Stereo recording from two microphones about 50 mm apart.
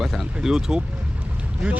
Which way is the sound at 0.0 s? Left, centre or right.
Centre.